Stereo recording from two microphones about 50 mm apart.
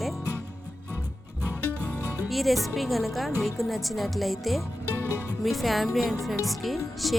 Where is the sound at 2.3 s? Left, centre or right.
Centre.